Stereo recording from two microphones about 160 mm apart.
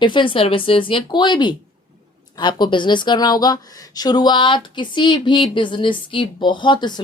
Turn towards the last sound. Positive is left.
turn(degrees=25)  # may be behind; listen again after turning